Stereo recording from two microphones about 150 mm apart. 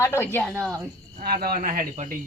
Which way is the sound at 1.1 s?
85° right.